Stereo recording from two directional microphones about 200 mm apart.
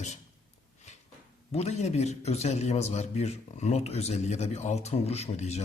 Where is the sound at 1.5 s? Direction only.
35° left (ahead or behind).